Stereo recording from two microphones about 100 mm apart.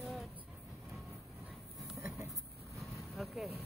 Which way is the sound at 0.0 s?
Centre (ahead or behind).